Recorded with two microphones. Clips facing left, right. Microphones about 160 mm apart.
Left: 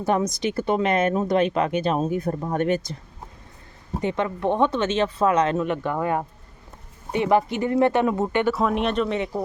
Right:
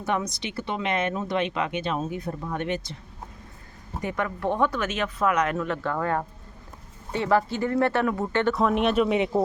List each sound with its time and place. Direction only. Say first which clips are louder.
0.0 s speech: left 6 dB; 40° left (ahead or behind)
4.0 s speech: left 4 dB; 25° left (ahead or behind)
8.5 s speech: right 1 dB; centre (ahead or behind)
9.1 s speech: right 3 dB; 20° right (ahead or behind)